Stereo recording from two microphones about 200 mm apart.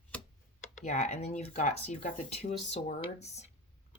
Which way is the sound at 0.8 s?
35° left (ahead or behind).